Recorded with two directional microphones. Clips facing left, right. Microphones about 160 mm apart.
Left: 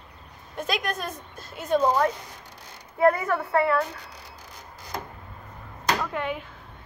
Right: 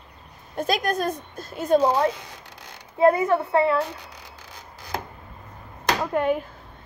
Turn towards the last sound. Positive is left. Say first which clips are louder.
# right 8 dB
turn(degrees=-45)  # may be behind; listen again after turning